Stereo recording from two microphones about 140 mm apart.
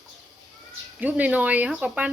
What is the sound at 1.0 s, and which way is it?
A woman's voice, 10° right (ahead or behind).